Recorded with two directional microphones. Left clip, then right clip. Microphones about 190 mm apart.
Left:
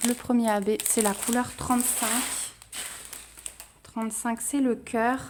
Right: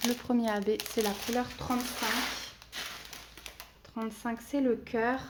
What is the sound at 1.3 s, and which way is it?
Speech, 65° left (ahead or behind).